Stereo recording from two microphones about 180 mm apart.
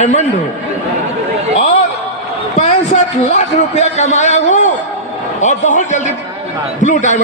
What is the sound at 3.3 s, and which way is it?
A man's voice, 40° left (ahead or behind).